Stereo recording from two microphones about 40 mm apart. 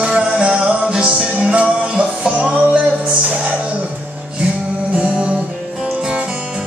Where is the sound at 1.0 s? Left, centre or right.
Right.